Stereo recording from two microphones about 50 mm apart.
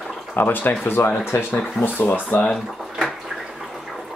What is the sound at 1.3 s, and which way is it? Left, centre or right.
Speech, left.